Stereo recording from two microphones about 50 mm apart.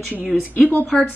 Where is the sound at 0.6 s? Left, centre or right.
Left.